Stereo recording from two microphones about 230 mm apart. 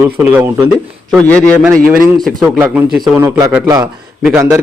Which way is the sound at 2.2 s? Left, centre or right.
Centre.